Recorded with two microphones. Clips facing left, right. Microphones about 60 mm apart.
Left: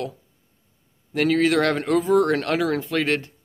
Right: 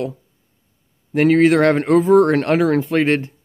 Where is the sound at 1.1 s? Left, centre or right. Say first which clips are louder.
Right 6 dB; right.